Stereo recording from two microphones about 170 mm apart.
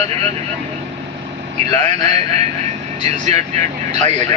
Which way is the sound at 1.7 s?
40° right (ahead or behind).